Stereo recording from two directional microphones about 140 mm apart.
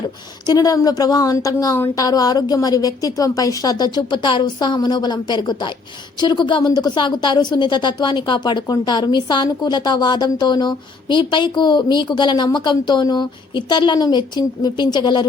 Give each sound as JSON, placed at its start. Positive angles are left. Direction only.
{"t": 0.4, "sound": "a woman's voice", "side_deg": 25}